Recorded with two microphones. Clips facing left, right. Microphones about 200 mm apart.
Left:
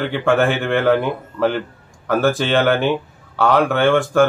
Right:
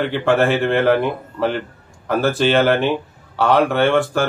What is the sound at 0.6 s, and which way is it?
Speech, 30° right (ahead or behind).